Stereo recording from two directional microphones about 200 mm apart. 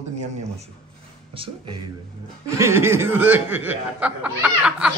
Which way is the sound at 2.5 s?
15° right (ahead or behind).